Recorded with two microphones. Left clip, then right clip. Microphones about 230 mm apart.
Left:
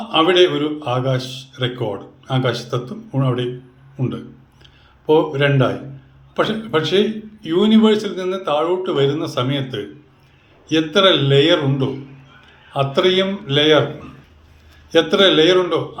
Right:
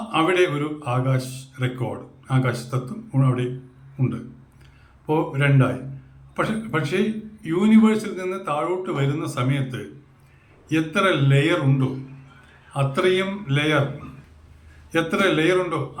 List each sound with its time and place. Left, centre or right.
0.1 s a man's voice: centre
5.0 s a man's voice: centre
10.7 s a man's voice: centre
14.9 s a man's voice: centre